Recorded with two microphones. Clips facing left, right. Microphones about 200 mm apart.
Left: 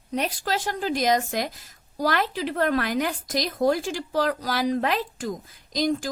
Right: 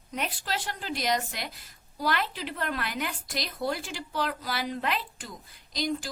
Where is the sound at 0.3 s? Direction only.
45° left (ahead or behind).